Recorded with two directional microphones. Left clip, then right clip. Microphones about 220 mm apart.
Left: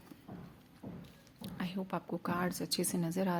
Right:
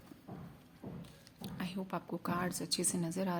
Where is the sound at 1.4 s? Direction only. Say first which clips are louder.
Left 1 dB; 15° left (ahead or behind).